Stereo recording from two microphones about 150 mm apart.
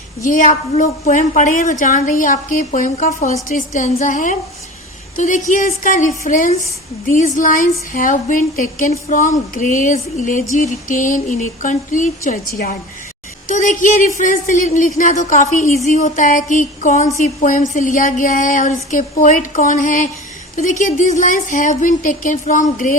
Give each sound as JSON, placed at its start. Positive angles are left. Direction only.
{"t": 0.2, "sound": "speech", "side_deg": 60}